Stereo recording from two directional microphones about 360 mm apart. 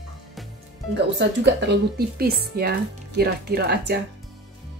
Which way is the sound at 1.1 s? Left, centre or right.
Right.